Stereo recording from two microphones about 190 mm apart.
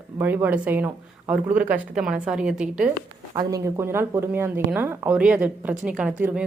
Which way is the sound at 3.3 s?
20° right (ahead or behind).